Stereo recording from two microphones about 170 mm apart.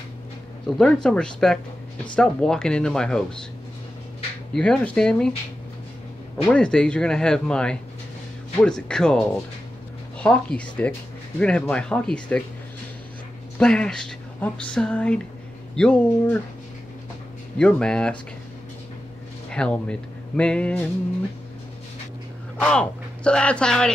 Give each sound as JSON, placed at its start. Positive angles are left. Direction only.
{"t": 0.7, "sound": "speech", "side_deg": 5}
{"t": 4.6, "sound": "speech", "side_deg": 5}
{"t": 6.4, "sound": "speech", "side_deg": 5}
{"t": 13.6, "sound": "speech", "side_deg": 5}
{"t": 17.6, "sound": "speech", "side_deg": 5}
{"t": 19.5, "sound": "speech", "side_deg": 5}
{"t": 22.6, "sound": "speech", "side_deg": 5}